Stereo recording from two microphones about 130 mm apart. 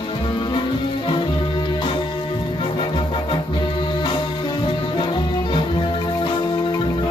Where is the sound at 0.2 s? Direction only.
40° left (ahead or behind).